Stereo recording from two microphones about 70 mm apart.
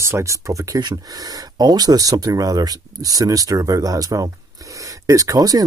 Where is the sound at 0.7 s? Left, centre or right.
Right.